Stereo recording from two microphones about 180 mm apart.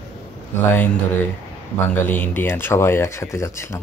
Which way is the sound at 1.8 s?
10° left (ahead or behind).